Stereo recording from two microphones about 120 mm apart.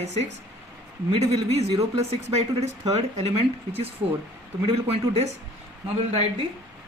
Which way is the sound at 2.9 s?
65° right (ahead or behind).